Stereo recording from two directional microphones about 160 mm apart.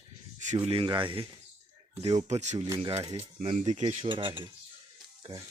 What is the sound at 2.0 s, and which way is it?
Speech, 45° right (ahead or behind).